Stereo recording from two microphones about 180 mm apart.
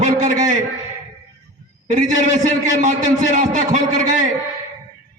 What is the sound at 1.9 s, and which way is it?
Speech, 45° right (ahead or behind).